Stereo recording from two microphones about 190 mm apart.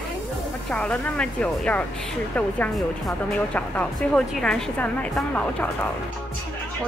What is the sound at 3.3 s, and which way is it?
A woman's voice, 5° left (ahead or behind).